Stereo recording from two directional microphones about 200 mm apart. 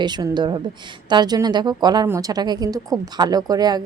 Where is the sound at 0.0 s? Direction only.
20° right (ahead or behind).